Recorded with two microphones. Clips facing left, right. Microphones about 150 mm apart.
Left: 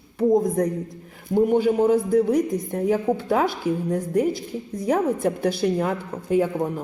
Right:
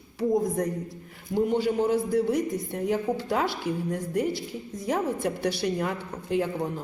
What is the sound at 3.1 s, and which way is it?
Speech, 50° left (ahead or behind).